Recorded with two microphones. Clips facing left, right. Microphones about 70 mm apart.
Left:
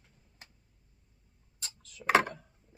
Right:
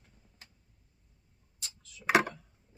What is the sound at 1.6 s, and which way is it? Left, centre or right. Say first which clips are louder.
Tick-tock: left 2 dB; left.